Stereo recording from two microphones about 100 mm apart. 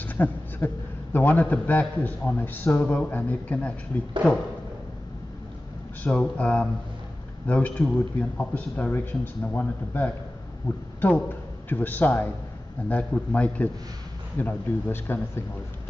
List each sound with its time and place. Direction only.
0.0 s a sound: 15° left (ahead or behind)
1.1 s speech: 15° left (ahead or behind)
6.0 s speech: 15° left (ahead or behind)